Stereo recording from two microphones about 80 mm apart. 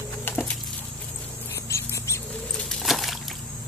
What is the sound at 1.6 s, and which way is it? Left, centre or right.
Dog, left.